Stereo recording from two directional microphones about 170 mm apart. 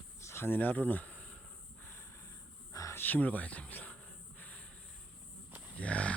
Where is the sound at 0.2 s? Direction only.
15° left (ahead or behind).